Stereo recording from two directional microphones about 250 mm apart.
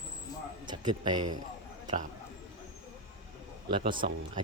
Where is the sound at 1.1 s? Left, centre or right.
Right.